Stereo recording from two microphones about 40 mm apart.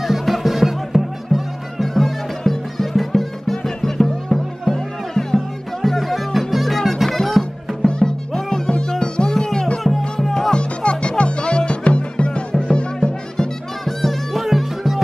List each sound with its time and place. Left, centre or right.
0.0 s music: centre
7.8 s music: centre
8.6 s music: centre
10.5 s music: left
13.8 s music: centre